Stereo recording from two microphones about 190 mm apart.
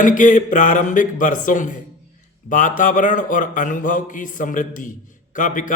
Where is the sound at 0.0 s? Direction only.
45° left (ahead or behind).